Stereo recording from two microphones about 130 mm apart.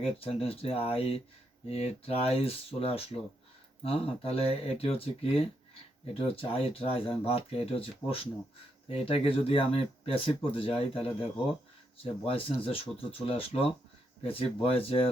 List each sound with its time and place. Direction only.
0.0 s speech: 50° left (ahead or behind)